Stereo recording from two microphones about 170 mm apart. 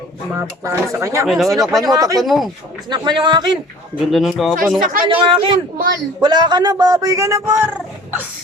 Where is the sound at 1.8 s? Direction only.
20° right (ahead or behind).